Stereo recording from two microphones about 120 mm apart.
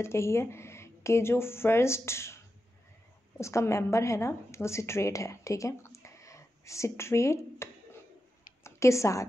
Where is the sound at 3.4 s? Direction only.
25° left (ahead or behind).